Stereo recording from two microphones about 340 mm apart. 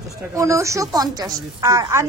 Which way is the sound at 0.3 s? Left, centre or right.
Centre.